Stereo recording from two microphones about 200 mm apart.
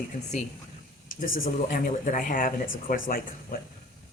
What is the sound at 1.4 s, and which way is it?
Speech, 45° left (ahead or behind).